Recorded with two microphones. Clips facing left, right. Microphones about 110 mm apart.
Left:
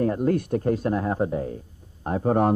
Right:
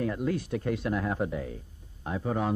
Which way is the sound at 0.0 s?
40° left (ahead or behind).